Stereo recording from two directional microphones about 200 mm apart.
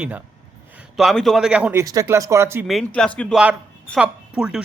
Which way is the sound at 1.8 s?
15° right (ahead or behind).